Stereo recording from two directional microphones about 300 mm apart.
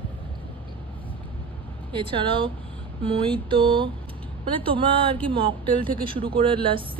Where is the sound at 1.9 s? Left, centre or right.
Centre.